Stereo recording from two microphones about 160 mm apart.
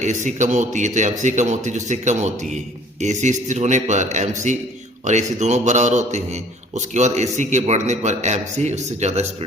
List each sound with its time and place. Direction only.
0.0 s a man's voice: 50° right (ahead or behind)